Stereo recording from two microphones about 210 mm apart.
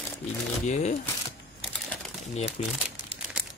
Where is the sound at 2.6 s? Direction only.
30° left (ahead or behind).